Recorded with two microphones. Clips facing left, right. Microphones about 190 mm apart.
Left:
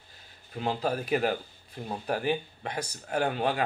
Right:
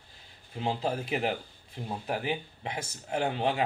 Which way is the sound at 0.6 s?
25° right (ahead or behind).